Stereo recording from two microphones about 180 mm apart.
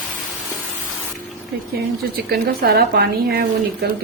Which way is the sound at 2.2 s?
60° right (ahead or behind).